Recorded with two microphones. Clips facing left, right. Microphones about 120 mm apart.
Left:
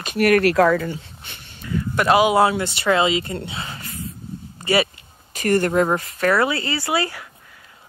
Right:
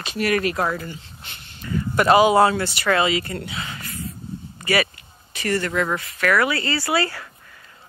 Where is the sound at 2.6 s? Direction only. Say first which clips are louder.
Left 2 dB; 20° left (ahead or behind).